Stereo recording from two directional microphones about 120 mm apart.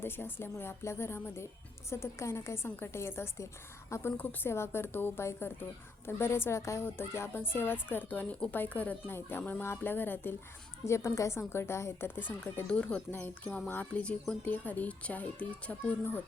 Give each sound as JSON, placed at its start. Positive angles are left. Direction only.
{"t": 0.0, "sound": "a woman's voice", "side_deg": 20}